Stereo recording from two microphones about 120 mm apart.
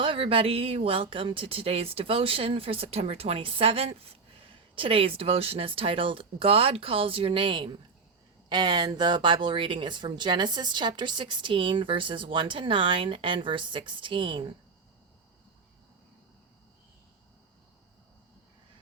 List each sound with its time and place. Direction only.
0.0 s speech: 50° right (ahead or behind)